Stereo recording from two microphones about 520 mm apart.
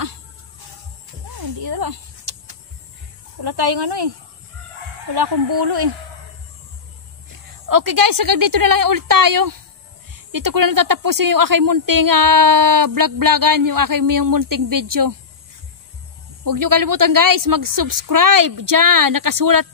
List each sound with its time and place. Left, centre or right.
1.3 s a sound: right
3.4 s speech: right
5.1 s speech: right
7.6 s speech: right
16.4 s speech: right